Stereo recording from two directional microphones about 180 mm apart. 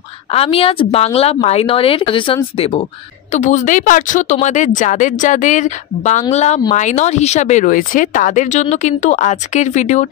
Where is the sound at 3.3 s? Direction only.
40° left (ahead or behind).